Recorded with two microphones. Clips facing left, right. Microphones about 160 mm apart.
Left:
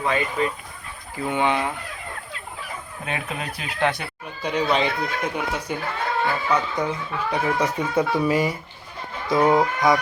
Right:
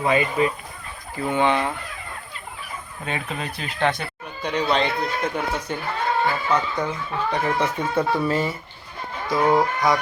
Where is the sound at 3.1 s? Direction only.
5° left (ahead or behind).